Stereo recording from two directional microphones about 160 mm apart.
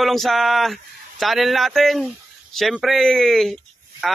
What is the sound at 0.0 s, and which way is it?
Speech, centre (ahead or behind).